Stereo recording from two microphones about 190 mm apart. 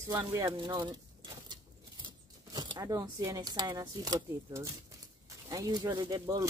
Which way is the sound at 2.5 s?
20° right (ahead or behind).